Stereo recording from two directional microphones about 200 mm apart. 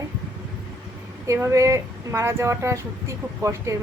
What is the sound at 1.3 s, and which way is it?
Speech, 15° right (ahead or behind).